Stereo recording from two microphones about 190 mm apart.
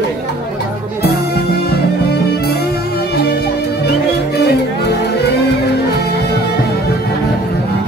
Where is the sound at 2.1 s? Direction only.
55° left (ahead or behind).